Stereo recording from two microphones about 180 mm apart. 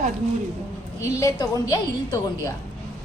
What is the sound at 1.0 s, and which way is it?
A woman's voice, 20° left (ahead or behind).